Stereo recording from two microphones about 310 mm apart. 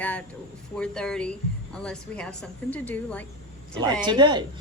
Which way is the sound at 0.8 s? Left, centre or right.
Centre.